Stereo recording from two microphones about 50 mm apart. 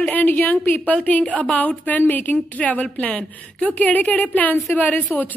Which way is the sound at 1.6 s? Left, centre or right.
Left.